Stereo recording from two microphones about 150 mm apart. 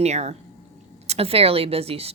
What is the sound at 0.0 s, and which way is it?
Speech, 45° right (ahead or behind).